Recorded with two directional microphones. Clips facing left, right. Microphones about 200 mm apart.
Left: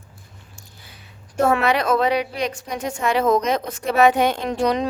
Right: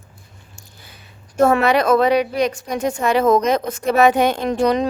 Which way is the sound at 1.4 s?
40° right (ahead or behind).